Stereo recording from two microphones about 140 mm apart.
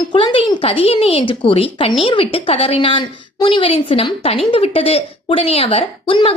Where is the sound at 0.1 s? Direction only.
35° left (ahead or behind).